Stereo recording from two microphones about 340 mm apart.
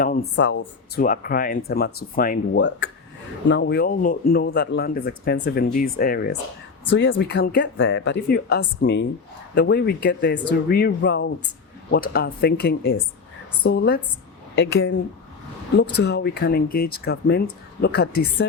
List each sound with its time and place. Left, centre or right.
0.0 s speech: left